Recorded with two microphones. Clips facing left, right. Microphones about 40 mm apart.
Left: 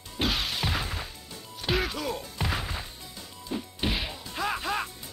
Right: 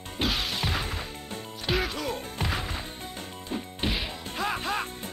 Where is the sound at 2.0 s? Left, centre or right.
Right.